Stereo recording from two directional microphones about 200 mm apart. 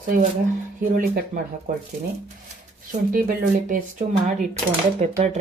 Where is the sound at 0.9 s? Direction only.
50° right (ahead or behind).